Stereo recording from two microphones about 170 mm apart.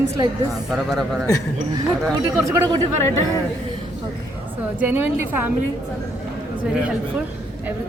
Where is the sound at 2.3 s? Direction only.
20° right (ahead or behind).